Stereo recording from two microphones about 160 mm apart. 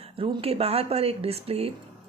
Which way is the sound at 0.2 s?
35° right (ahead or behind).